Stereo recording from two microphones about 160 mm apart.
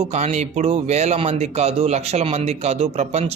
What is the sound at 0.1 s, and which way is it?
Speech, 45° right (ahead or behind).